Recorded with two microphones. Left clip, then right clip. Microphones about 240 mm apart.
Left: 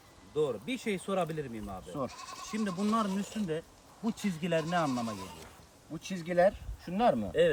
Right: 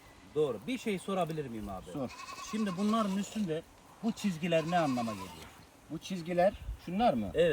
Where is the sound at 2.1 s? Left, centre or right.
Left.